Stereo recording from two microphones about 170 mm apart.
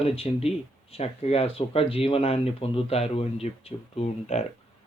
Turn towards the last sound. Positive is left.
turn(degrees=40)  # may be behind; listen again after turning